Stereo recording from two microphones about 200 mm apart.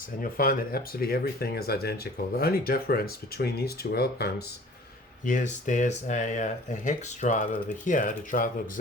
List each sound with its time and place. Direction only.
0.2 s speech: 45° left (ahead or behind)
5.2 s speech: 40° left (ahead or behind)